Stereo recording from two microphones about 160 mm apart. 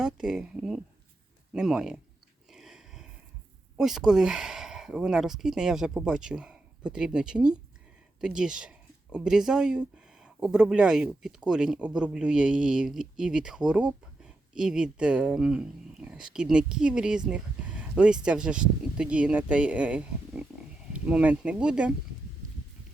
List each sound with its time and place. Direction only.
0.0 s speech: 5° right (ahead or behind)
2.5 s a sound: 5° right (ahead or behind)
3.8 s speech: 5° right (ahead or behind)
22.4 s horse: 55° right (ahead or behind)